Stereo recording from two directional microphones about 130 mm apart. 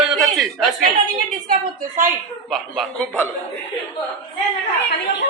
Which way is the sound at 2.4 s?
Centre (ahead or behind).